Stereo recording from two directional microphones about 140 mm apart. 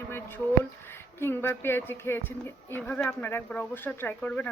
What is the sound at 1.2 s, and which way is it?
Speech, 15° left (ahead or behind).